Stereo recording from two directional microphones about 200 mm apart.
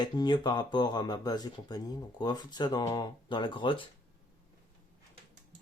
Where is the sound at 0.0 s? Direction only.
20° left (ahead or behind).